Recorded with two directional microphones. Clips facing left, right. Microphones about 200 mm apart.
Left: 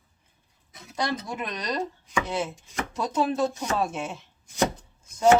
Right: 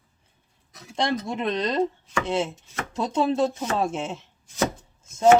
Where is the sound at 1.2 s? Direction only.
25° right (ahead or behind).